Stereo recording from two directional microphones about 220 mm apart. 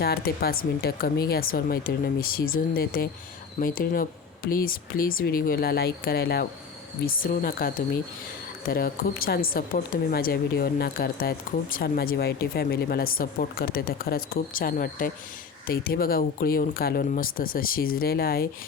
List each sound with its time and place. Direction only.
0.0 s speech: 45° left (ahead or behind)